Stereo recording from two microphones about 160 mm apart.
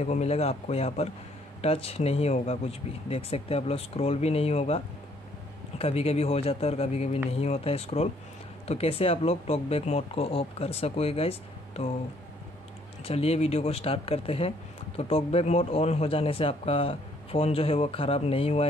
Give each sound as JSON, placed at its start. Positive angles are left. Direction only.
{"t": 0.0, "sound": "a man's voice", "side_deg": 45}
{"t": 13.0, "sound": "a man's voice", "side_deg": 40}